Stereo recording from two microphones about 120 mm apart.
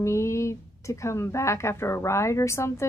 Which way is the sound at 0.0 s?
25° left (ahead or behind).